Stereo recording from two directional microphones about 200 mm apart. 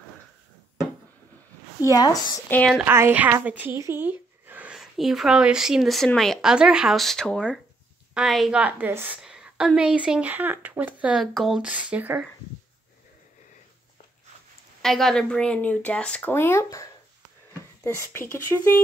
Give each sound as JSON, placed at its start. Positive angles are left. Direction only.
{"t": 1.9, "sound": "a woman's voice", "side_deg": 20}
{"t": 2.5, "sound": "speech", "side_deg": 5}
{"t": 2.8, "sound": "speech", "side_deg": -10}
{"t": 14.8, "sound": "speech", "side_deg": 0}
{"t": 17.8, "sound": "speech", "side_deg": 15}